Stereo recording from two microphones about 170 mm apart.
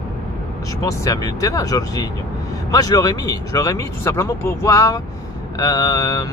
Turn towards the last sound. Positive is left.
turn(degrees=20)  # may be behind; listen again after turning